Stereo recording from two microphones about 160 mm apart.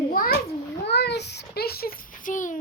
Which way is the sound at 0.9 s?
90° left.